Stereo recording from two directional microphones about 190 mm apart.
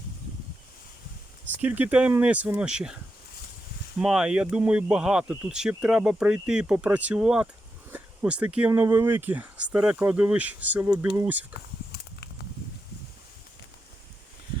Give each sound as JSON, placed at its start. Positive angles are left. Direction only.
{"t": 1.6, "sound": "speech", "side_deg": -10}
{"t": 4.0, "sound": "speech", "side_deg": -5}
{"t": 11.5, "sound": "a sound", "side_deg": 60}